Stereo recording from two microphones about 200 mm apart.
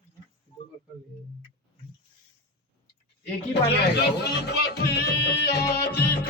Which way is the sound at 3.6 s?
55° left (ahead or behind).